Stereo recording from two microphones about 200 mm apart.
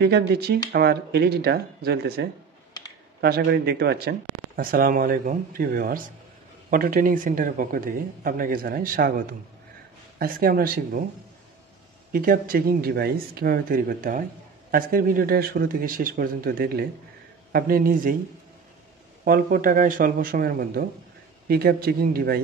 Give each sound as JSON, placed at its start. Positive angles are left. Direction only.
{"t": 0.0, "sound": "speech", "side_deg": -55}
{"t": 12.1, "sound": "speech", "side_deg": -45}
{"t": 19.2, "sound": "speech", "side_deg": -45}